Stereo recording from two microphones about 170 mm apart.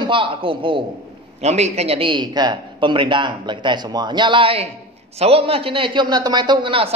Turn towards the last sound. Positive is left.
turn(degrees=-30)  # may be behind; listen again after turning